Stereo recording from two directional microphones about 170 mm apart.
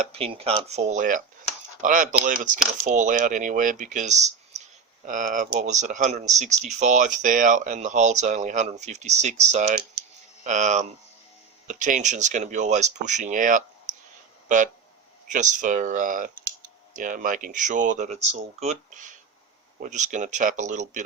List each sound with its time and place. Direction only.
0.0 s speech: 35° right (ahead or behind)